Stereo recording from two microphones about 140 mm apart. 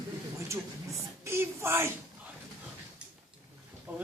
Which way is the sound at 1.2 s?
20° right (ahead or behind).